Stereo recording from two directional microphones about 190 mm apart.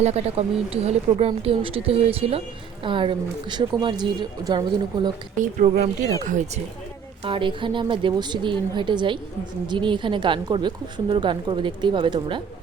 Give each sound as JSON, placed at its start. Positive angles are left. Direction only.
{"t": 0.0, "sound": "a woman's voice", "side_deg": -30}
{"t": 5.4, "sound": "speech", "side_deg": -40}
{"t": 7.3, "sound": "a woman's voice", "side_deg": -25}